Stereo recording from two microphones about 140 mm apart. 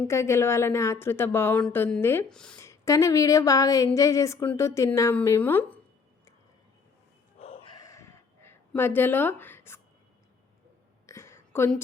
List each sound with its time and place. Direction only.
0.0 s speech: 20° left (ahead or behind)
2.3 s speech: 5° left (ahead or behind)
2.6 s speech: 20° left (ahead or behind)
7.3 s bow-wow: 45° left (ahead or behind)
7.9 s a sound: 20° left (ahead or behind)
11.0 s a sound: 20° left (ahead or behind)